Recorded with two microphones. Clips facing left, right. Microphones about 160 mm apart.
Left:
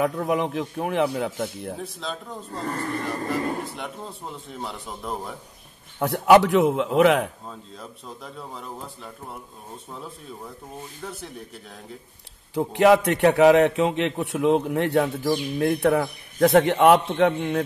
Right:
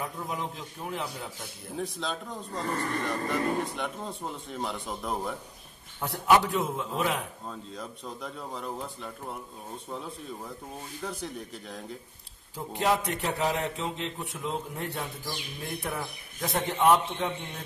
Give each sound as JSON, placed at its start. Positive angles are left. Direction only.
{"t": 0.0, "sound": "a man's voice", "side_deg": 70}
{"t": 1.8, "sound": "a man's voice", "side_deg": 0}
{"t": 5.9, "sound": "a man's voice", "side_deg": 70}
{"t": 7.4, "sound": "a man's voice", "side_deg": 0}
{"t": 11.1, "sound": "a man's voice", "side_deg": 0}
{"t": 12.5, "sound": "a man's voice", "side_deg": 75}